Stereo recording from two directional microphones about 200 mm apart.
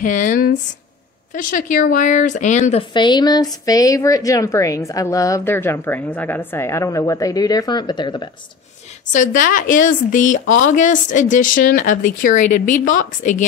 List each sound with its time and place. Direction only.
0.0 s a woman's voice: 40° left (ahead or behind)
2.9 s a woman's voice: 20° left (ahead or behind)
9.1 s a woman's voice: 40° left (ahead or behind)